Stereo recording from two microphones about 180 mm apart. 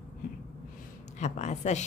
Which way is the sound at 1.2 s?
40° left (ahead or behind).